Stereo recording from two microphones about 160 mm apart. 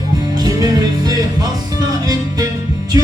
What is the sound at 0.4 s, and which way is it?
Music, 25° right (ahead or behind).